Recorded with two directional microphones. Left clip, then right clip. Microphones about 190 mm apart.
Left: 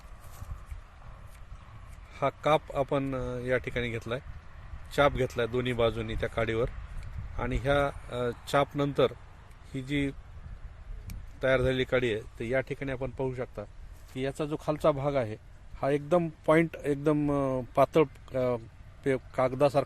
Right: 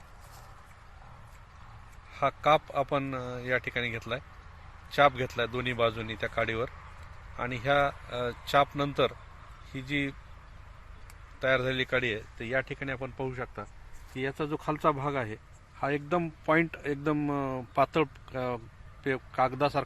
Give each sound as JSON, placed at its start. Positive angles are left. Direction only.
{"t": 2.1, "sound": "speech", "side_deg": 65}
{"t": 11.3, "sound": "speech", "side_deg": 65}
{"t": 14.2, "sound": "speech", "side_deg": 50}
{"t": 15.8, "sound": "a man's voice", "side_deg": 65}